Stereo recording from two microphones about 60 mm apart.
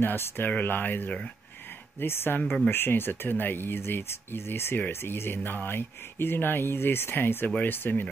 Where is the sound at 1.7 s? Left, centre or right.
Left.